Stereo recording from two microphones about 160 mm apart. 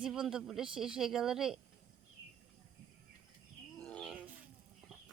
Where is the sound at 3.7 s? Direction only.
5° left (ahead or behind).